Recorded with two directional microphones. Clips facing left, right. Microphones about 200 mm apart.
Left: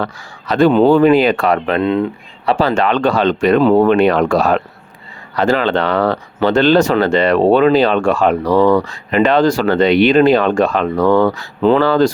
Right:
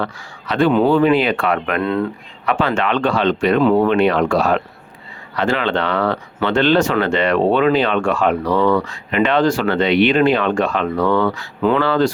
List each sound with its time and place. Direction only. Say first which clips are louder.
0.0 s speech: left 2 dB; 40° left (ahead or behind); by 2.0 s 20° left (ahead or behind)
2.5 s speech: left 4 dB; 35° left (ahead or behind)